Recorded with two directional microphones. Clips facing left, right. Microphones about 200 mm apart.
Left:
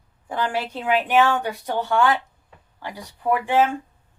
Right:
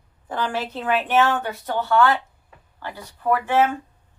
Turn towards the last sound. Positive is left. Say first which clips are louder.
# even
turn(degrees=15)  # may be behind; listen again after turning